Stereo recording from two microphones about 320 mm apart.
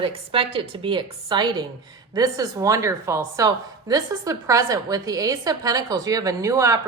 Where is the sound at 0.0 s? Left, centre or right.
Centre.